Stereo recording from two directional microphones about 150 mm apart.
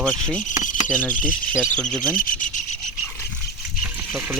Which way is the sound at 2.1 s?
65° left (ahead or behind).